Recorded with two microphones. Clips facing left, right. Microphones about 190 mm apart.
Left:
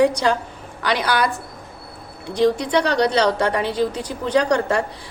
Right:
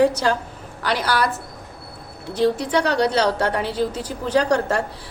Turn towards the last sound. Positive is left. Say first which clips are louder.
# left 1 dB
turn(degrees=-5)  # may be behind; listen again after turning